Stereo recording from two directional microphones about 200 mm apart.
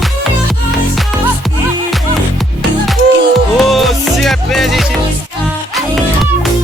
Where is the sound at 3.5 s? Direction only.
Centre (ahead or behind).